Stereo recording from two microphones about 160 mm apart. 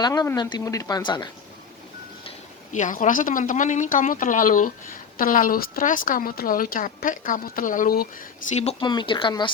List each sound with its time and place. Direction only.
0.0 s speech: 25° left (ahead or behind)
2.7 s a woman's voice: 50° left (ahead or behind)
8.5 s speech: 40° left (ahead or behind)
8.9 s speech: 30° left (ahead or behind)